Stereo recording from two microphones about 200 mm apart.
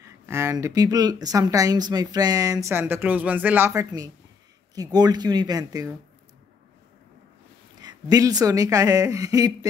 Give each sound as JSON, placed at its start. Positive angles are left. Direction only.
{"t": 0.0, "sound": "speech", "side_deg": -15}
{"t": 7.8, "sound": "speech", "side_deg": -20}